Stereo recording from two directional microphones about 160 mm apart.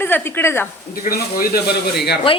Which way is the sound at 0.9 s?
75° left (ahead or behind).